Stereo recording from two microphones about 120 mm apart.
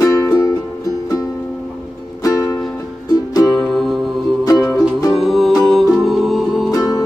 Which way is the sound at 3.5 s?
5° left (ahead or behind).